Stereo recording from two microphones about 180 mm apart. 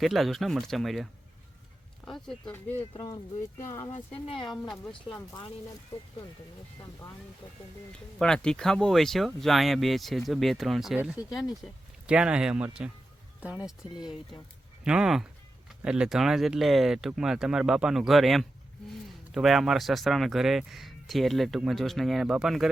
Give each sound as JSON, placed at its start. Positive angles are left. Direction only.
{"t": 0.0, "sound": "speech", "side_deg": 0}
{"t": 2.0, "sound": "speech", "side_deg": 0}
{"t": 2.9, "sound": "speech", "side_deg": 20}
{"t": 8.2, "sound": "speech", "side_deg": 5}